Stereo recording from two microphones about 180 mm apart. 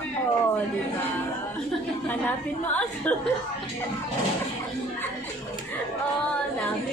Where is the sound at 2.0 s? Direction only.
10° left (ahead or behind).